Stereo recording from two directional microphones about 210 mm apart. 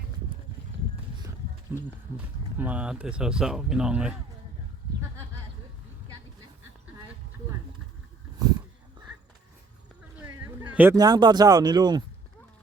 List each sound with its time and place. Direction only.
1.7 s speech: 10° right (ahead or behind)
10.2 s speech: 10° right (ahead or behind)